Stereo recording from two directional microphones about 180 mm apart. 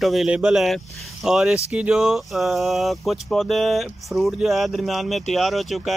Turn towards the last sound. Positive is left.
turn(degrees=0)  # may be behind; listen again after turning